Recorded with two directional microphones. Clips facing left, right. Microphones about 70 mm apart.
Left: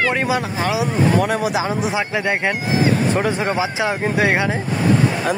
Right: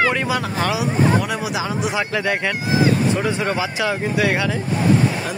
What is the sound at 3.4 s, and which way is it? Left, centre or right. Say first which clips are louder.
Speech: left 1 dB; centre.